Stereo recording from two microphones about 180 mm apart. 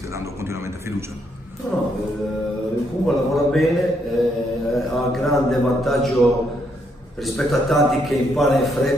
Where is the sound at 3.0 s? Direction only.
Centre (ahead or behind).